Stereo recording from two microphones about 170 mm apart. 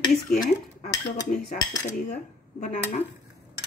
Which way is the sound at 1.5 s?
50° left (ahead or behind).